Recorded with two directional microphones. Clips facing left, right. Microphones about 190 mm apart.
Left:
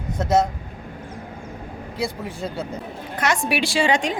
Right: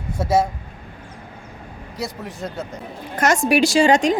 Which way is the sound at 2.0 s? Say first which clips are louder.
Left 1 dB; centre (ahead or behind).